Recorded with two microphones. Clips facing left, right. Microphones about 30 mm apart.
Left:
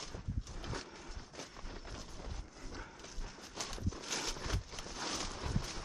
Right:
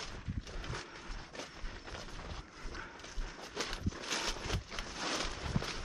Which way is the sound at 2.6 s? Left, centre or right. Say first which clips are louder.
Right 2 dB; centre.